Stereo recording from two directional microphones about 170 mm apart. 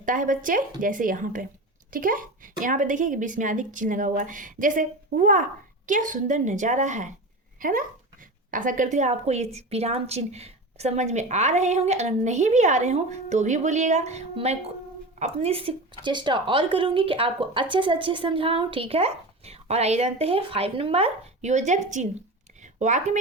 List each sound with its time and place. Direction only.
0.0 s a woman's voice: 50° right (ahead or behind)
7.6 s a woman's voice: 55° right (ahead or behind)
22.6 s a sound: 45° right (ahead or behind)